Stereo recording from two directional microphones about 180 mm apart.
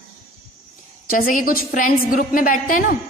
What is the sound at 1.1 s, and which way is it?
A woman's voice, 50° left (ahead or behind).